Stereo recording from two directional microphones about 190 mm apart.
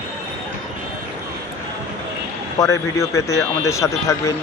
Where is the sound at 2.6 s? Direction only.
15° left (ahead or behind).